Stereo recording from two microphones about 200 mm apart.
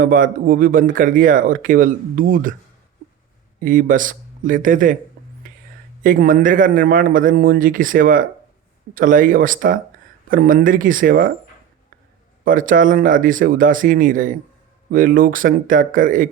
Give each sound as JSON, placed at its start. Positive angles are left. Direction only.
{"t": 0.0, "sound": "speech", "side_deg": -45}
{"t": 3.6, "sound": "speech", "side_deg": -45}
{"t": 5.2, "sound": "a sound", "side_deg": -50}
{"t": 6.0, "sound": "speech", "side_deg": -45}
{"t": 12.5, "sound": "speech", "side_deg": -45}